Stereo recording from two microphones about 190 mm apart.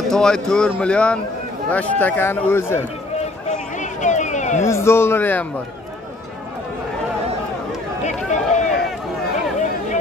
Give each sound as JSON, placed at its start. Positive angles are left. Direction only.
{"t": 0.1, "sound": "speech", "side_deg": 5}
{"t": 3.4, "sound": "a sound", "side_deg": 40}
{"t": 4.6, "sound": "speech", "side_deg": 15}
{"t": 8.0, "sound": "run", "side_deg": 40}